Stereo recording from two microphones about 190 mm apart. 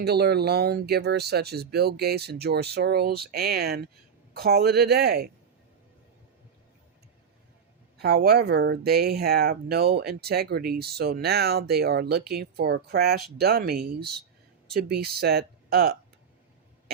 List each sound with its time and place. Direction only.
0.0 s speech: 60° right (ahead or behind)
7.9 s speech: 60° right (ahead or behind)